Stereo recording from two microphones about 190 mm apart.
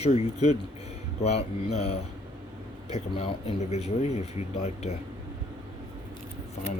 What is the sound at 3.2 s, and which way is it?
Speech, 35° left (ahead or behind).